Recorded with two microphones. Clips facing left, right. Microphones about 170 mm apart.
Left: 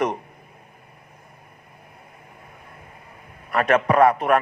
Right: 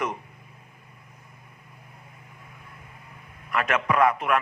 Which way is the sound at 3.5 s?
35° left (ahead or behind).